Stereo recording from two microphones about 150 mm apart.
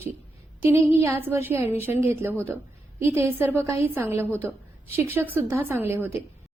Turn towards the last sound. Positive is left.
turn(degrees=-15)  # may be behind; listen again after turning